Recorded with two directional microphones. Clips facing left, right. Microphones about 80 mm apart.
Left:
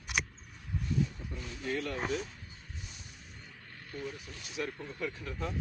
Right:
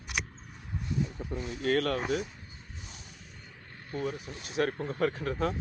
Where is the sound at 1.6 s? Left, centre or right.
Right.